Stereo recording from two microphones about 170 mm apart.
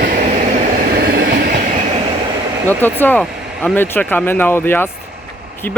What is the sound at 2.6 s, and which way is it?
Vehicle, 10° left (ahead or behind).